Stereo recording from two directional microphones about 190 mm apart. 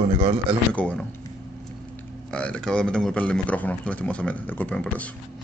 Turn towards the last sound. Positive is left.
turn(degrees=5)  # may be behind; listen again after turning